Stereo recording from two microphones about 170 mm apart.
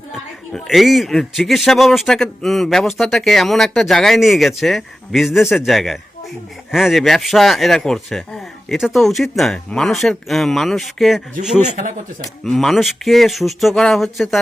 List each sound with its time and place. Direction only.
0.5 s a man's voice: centre (ahead or behind)
11.6 s speech: 45° right (ahead or behind)
12.5 s a man's voice: centre (ahead or behind)